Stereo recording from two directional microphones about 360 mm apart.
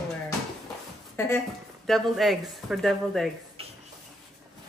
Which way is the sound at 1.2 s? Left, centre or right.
Centre.